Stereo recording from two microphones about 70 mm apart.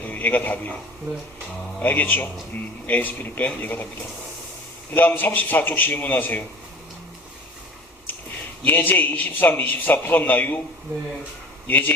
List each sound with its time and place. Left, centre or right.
0.1 s a man's voice: left
1.8 s a man's voice: left
4.9 s a man's voice: left
8.6 s a man's voice: left
11.7 s a man's voice: left